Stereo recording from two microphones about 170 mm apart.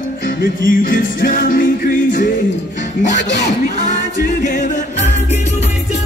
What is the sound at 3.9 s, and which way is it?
A capella, 45° left (ahead or behind).